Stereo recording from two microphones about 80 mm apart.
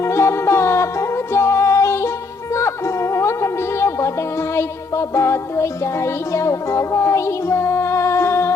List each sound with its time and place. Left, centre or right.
0.0 s music: left